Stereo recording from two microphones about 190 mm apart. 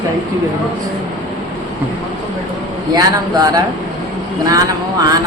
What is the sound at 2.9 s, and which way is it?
A man's voice, 20° right (ahead or behind).